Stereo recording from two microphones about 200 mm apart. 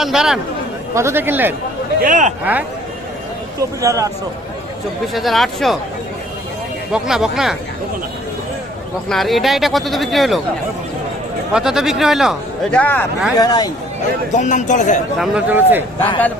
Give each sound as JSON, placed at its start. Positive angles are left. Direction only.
{"t": 0.0, "sound": "a man's voice", "side_deg": 0}
{"t": 0.9, "sound": "speech", "side_deg": -10}
{"t": 2.0, "sound": "speech", "side_deg": -40}
{"t": 2.4, "sound": "speech", "side_deg": -10}
{"t": 3.8, "sound": "speech", "side_deg": -15}
{"t": 5.1, "sound": "a man's voice", "side_deg": 0}
{"t": 6.9, "sound": "a man's voice", "side_deg": 0}
{"t": 9.0, "sound": "a man's voice", "side_deg": 0}
{"t": 11.5, "sound": "a man's voice", "side_deg": 0}
{"t": 13.3, "sound": "speech", "side_deg": 20}
{"t": 14.3, "sound": "speech", "side_deg": 35}
{"t": 15.2, "sound": "speech", "side_deg": -5}